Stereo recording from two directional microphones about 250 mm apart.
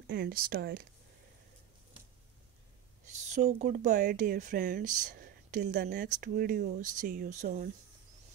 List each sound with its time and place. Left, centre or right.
0.0 s speech: right
3.1 s speech: right